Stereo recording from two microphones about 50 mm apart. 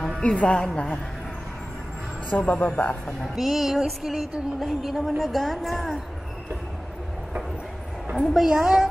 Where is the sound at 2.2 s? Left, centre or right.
Left.